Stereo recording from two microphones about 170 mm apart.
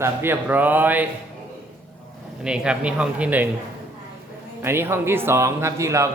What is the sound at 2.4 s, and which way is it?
A man's voice, 5° right (ahead or behind).